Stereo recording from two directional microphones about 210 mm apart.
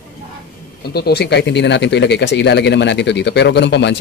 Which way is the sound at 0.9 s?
50° left (ahead or behind).